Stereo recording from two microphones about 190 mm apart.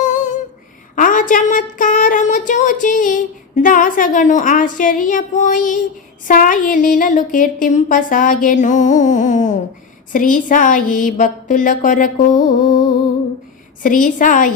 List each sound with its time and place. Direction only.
0.9 s a woman's voice: 45° left (ahead or behind)
13.8 s a woman's voice: 45° left (ahead or behind)